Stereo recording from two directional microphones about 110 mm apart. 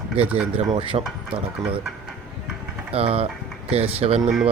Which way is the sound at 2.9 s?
60° right (ahead or behind).